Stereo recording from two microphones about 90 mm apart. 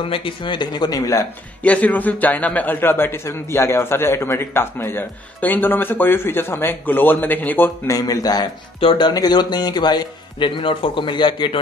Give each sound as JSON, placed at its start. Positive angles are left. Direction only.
{"t": 0.0, "sound": "speech", "side_deg": 80}
{"t": 1.6, "sound": "a man's voice", "side_deg": 15}
{"t": 7.9, "sound": "speech", "side_deg": 45}
{"t": 8.7, "sound": "speech", "side_deg": 75}
{"t": 9.1, "sound": "speech", "side_deg": 50}